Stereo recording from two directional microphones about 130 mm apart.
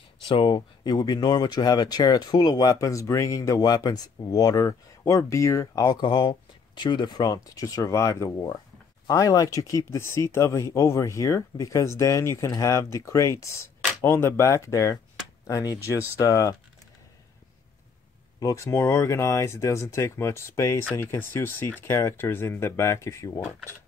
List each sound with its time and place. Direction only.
0.3 s speech: 40° left (ahead or behind)
18.4 s speech: 25° left (ahead or behind)